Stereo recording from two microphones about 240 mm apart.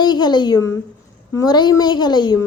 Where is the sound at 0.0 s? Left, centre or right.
Centre.